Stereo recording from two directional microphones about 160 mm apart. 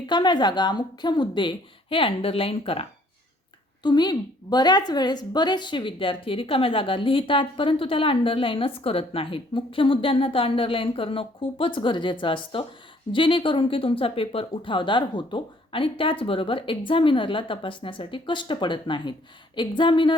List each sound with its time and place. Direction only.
0.1 s a woman's voice: 25° left (ahead or behind)
3.8 s a woman's voice: 25° left (ahead or behind)